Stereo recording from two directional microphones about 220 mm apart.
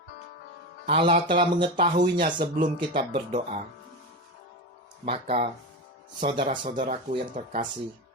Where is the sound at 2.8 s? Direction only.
25° right (ahead or behind).